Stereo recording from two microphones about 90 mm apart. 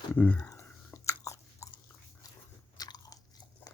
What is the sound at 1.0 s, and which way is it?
Biting, 35° left (ahead or behind).